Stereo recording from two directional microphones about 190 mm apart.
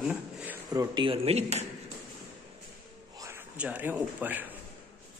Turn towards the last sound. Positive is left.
turn(degrees=-10)  # may be behind; listen again after turning